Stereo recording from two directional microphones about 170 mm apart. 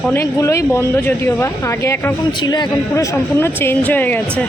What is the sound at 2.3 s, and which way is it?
Speech, 25° left (ahead or behind).